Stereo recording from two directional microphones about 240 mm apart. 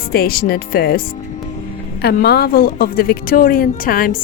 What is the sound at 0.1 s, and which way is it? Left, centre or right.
A woman's voice, left.